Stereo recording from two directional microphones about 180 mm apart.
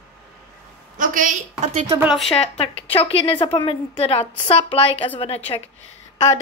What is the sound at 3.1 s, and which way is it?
A woman's voice, 30° left (ahead or behind).